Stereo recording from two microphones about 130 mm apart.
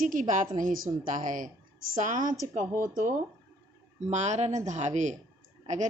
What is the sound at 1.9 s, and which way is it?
Speech, 80° right.